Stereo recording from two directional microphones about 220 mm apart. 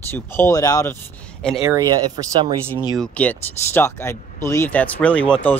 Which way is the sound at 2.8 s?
5° left (ahead or behind).